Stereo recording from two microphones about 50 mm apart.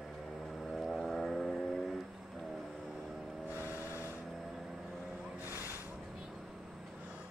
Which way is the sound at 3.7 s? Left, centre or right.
Left.